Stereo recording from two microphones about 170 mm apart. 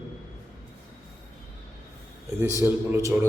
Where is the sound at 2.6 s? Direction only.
15° right (ahead or behind).